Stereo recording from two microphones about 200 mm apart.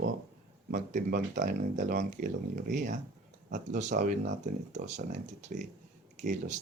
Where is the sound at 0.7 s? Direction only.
40° right (ahead or behind).